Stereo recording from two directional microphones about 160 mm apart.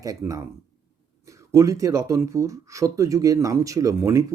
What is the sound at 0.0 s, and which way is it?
Speech, 20° right (ahead or behind).